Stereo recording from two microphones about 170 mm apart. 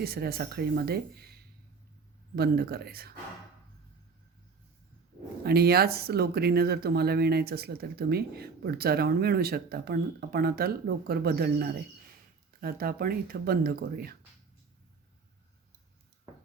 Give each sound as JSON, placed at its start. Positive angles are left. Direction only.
{"t": 0.0, "sound": "speech", "side_deg": -65}
{"t": 5.4, "sound": "speech", "side_deg": -65}